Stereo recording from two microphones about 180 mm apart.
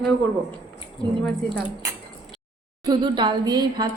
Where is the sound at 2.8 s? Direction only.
25° right (ahead or behind).